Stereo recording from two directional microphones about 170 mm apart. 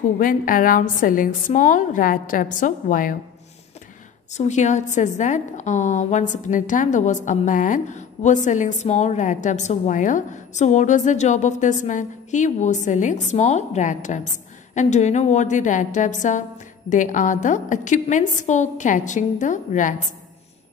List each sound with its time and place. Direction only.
0.2 s a woman's voice: 55° left (ahead or behind)
4.3 s a woman's voice: 45° left (ahead or behind)